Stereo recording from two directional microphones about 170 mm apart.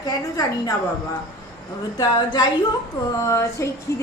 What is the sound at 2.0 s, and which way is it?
A woman's voice, 25° left (ahead or behind).